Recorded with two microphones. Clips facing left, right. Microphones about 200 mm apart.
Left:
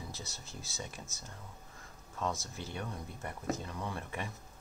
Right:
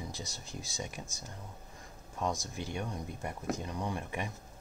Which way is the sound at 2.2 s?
15° right (ahead or behind).